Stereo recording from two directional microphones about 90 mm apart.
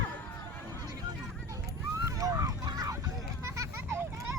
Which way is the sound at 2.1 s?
40° right (ahead or behind).